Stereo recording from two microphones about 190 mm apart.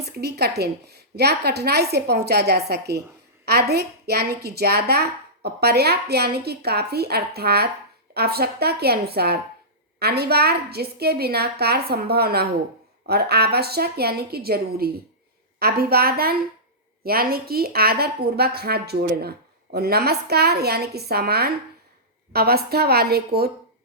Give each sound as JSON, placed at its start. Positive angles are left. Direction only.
{"t": 0.0, "sound": "a woman's voice", "side_deg": -60}